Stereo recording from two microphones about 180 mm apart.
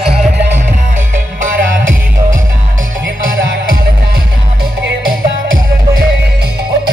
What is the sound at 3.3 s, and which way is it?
Music, 50° right (ahead or behind).